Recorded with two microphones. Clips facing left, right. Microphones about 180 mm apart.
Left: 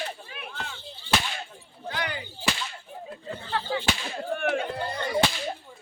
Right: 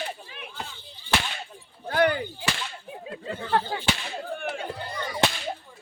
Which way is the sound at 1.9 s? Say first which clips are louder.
Right 10 dB; 55° right (ahead or behind).